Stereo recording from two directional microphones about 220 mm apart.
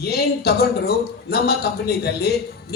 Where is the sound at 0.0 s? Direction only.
45° left (ahead or behind).